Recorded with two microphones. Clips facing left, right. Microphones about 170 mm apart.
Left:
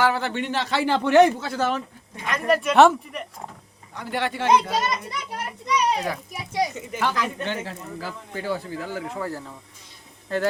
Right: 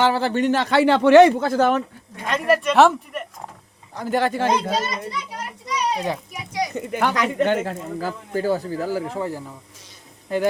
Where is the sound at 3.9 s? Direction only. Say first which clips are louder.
Right 6 dB; 40° right (ahead or behind).